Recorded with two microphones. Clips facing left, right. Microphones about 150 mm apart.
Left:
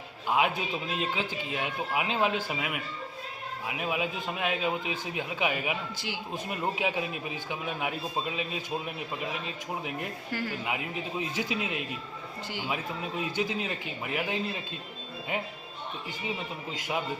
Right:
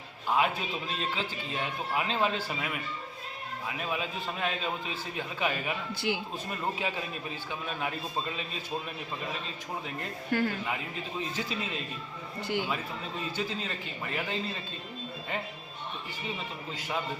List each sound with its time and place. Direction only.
0.3 s a man's voice: 10° left (ahead or behind)
10.3 s speech: 55° right (ahead or behind)
11.2 s a man's voice: 10° left (ahead or behind)
16.7 s a man's voice: 10° left (ahead or behind)